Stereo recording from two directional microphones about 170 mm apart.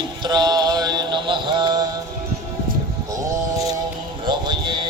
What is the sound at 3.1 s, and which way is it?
Mantra, 20° right (ahead or behind).